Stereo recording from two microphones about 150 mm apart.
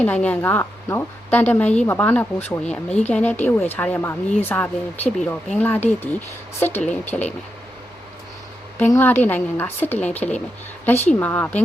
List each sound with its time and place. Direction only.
0.0 s a woman's voice: 10° left (ahead or behind)
8.9 s a woman's voice: 15° left (ahead or behind)